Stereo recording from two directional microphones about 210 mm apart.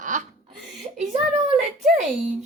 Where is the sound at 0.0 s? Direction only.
35° right (ahead or behind).